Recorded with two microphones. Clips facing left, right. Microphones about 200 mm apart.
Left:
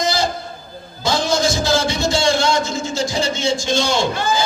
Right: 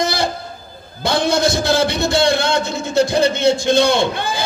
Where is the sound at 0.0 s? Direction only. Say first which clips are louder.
Even; 60° right (ahead or behind).